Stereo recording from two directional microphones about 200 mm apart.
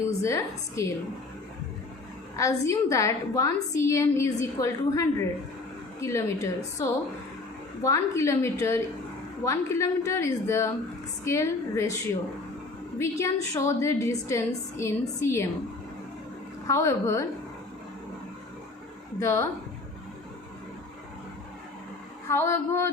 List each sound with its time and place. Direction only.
0.0 s a woman's voice: 15° left (ahead or behind)
2.3 s a woman's voice: 15° left (ahead or behind)
13.0 s a woman's voice: 15° left (ahead or behind)
16.6 s a woman's voice: 15° left (ahead or behind)
19.2 s a woman's voice: 15° left (ahead or behind)
22.3 s a woman's voice: 15° left (ahead or behind)